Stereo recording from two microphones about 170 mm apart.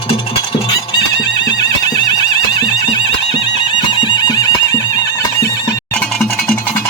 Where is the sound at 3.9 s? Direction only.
30° left (ahead or behind).